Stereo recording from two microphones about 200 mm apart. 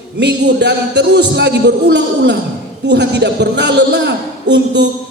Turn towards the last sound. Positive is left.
turn(degrees=-60)  # may be behind; listen again after turning